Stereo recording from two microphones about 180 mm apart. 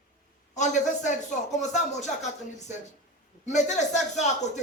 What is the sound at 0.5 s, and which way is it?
A man's voice, 40° left (ahead or behind).